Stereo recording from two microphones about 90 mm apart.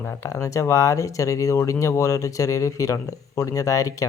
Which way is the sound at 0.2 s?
35° left (ahead or behind).